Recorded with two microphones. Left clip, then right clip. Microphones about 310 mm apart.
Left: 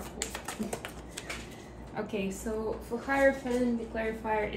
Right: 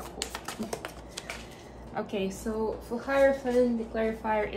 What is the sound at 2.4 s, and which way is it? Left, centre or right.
A woman's voice, right.